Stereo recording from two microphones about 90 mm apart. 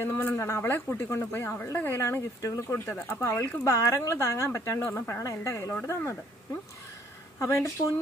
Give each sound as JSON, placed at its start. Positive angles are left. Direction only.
{"t": 0.0, "sound": "speech", "side_deg": 25}
{"t": 7.3, "sound": "speech", "side_deg": 35}